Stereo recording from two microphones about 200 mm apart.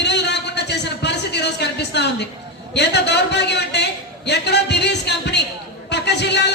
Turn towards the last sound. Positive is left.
turn(degrees=60)  # may be behind; listen again after turning